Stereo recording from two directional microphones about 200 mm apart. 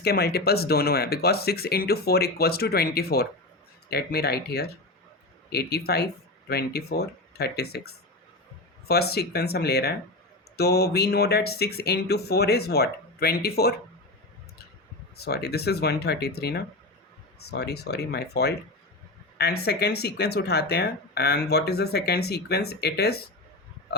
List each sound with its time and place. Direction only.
0.0 s speech: 50° left (ahead or behind)
15.1 s speech: 55° left (ahead or behind)
19.6 s speech: 55° left (ahead or behind)